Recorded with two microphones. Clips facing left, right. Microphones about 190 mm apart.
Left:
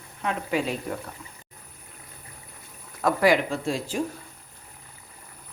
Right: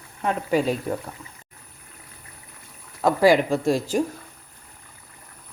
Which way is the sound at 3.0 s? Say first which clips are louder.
Right 4 dB; 25° right (ahead or behind).